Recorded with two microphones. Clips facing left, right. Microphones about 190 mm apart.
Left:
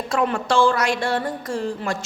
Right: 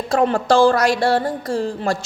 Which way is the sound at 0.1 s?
35° right (ahead or behind).